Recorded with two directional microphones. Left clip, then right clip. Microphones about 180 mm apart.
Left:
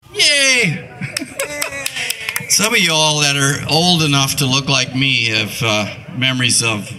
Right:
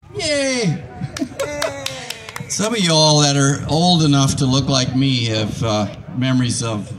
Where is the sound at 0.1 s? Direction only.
15° right (ahead or behind).